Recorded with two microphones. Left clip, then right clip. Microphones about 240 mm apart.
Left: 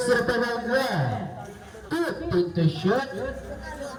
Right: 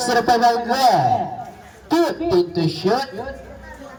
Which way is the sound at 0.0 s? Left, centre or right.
Right.